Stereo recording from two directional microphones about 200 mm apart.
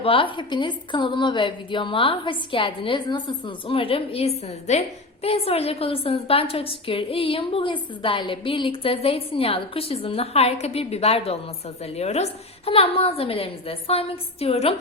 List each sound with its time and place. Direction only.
0.0 s a woman's voice: 25° left (ahead or behind)